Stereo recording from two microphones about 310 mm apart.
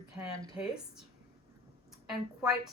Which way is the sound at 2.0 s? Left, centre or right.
Centre.